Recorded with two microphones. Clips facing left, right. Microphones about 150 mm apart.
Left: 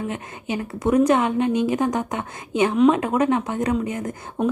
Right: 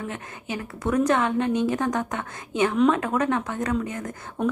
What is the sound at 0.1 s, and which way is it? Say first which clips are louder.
A woman's voice: left 5 dB; 20° left (ahead or behind).